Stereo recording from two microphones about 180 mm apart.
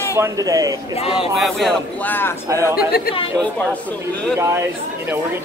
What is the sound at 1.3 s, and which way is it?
Speech, centre (ahead or behind).